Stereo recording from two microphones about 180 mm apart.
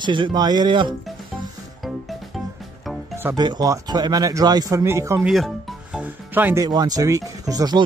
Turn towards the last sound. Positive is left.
turn(degrees=-20)  # may be behind; listen again after turning